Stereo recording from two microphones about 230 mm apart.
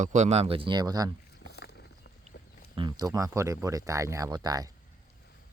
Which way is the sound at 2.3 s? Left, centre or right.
Left.